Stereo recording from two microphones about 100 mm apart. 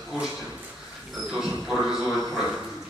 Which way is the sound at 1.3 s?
Centre (ahead or behind).